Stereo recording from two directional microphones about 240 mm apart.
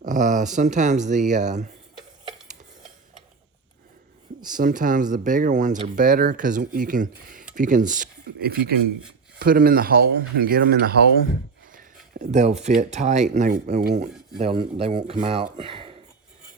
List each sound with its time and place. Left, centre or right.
0.0 s speech: right
4.4 s speech: right